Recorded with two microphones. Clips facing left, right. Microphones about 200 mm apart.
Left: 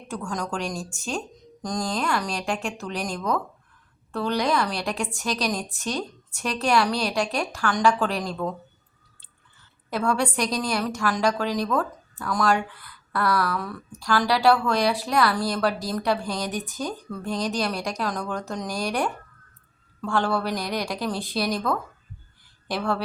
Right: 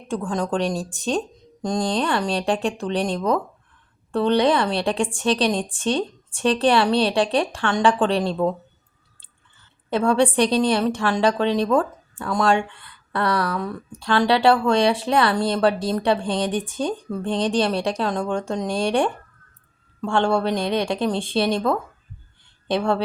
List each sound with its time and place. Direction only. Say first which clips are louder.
0.1 s a woman's voice: right 6 dB; 30° right (ahead or behind)
9.6 s a woman's voice: right 6 dB; 30° right (ahead or behind)